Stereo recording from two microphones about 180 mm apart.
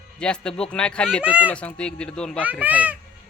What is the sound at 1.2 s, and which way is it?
Speech, 5° right (ahead or behind).